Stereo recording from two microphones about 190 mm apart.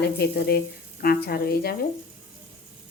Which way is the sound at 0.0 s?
55° left (ahead or behind).